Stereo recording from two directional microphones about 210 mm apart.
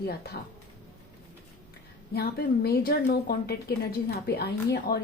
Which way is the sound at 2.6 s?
50° left (ahead or behind).